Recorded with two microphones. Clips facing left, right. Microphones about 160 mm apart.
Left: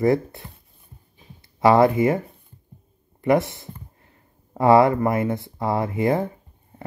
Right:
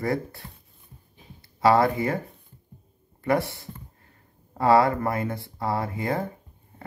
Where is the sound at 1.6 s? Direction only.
20° left (ahead or behind).